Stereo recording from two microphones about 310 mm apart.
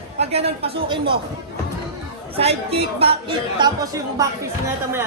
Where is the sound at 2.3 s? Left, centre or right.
Centre.